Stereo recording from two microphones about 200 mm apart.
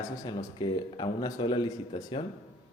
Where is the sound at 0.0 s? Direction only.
20° left (ahead or behind).